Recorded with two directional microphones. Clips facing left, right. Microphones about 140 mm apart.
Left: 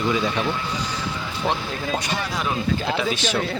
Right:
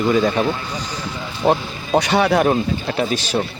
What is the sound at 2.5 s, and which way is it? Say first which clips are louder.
Speech: right 4 dB; 40° right (ahead or behind).